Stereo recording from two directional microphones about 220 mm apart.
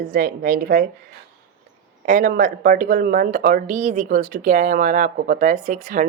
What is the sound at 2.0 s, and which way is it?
A woman's voice, 35° right (ahead or behind).